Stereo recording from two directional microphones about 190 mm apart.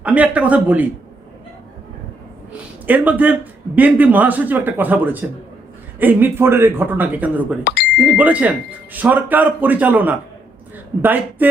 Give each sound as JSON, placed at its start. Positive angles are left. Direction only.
{"t": 0.0, "sound": "speech", "side_deg": -5}
{"t": 2.5, "sound": "a sound", "side_deg": -10}
{"t": 3.8, "sound": "speech", "side_deg": -10}
{"t": 7.6, "sound": "speech", "side_deg": 60}
{"t": 7.9, "sound": "speech", "side_deg": -5}